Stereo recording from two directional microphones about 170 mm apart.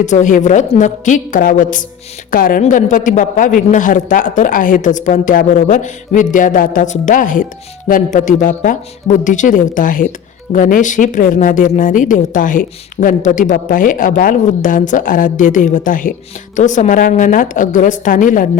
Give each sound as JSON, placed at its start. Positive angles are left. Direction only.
{"t": 0.0, "sound": "speech", "side_deg": 45}